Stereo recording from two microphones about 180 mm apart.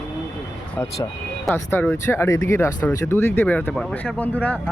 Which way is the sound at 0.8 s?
10° left (ahead or behind).